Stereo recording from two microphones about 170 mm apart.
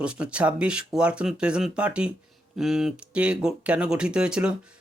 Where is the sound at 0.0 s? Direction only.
5° right (ahead or behind).